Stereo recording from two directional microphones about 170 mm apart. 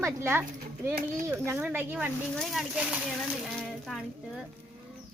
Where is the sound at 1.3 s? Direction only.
10° right (ahead or behind).